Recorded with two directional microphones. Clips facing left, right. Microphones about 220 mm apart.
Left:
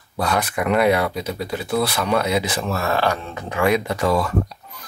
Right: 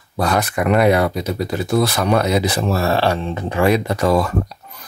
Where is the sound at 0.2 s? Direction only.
45° right (ahead or behind).